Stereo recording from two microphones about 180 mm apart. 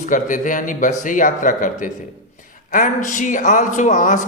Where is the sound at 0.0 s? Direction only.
45° left (ahead or behind).